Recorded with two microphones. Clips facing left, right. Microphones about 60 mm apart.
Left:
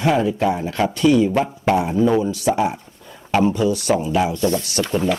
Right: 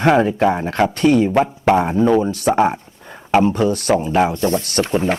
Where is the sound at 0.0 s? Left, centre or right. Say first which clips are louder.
Right 4 dB; right.